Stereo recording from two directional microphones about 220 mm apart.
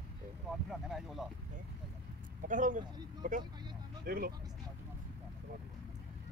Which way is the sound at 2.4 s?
35° right (ahead or behind).